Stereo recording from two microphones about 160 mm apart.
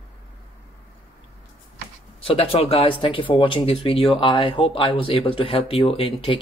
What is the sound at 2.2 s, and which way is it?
Speech, 35° left (ahead or behind).